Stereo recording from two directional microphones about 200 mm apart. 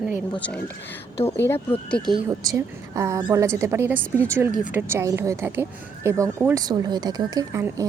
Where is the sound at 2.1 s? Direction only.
15° right (ahead or behind).